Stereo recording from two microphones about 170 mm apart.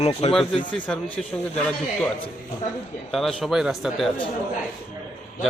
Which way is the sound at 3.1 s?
Centre (ahead or behind).